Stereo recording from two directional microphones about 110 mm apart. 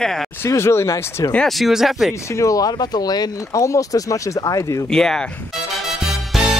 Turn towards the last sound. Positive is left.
turn(degrees=-5)  # may be behind; listen again after turning